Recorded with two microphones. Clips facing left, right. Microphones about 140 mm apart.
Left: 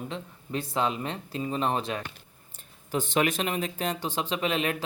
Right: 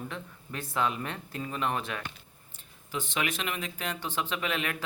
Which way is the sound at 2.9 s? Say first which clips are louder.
Left 7 dB; 40° left (ahead or behind).